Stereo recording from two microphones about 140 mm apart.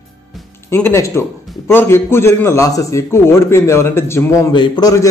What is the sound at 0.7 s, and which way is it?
A man's voice, 15° left (ahead or behind).